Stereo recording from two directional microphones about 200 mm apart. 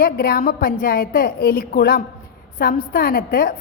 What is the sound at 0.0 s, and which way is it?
A woman's voice, 50° left (ahead or behind).